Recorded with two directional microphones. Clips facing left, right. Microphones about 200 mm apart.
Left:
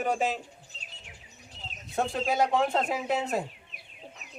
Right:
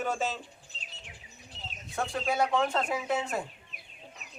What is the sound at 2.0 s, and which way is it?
Speech, 20° left (ahead or behind).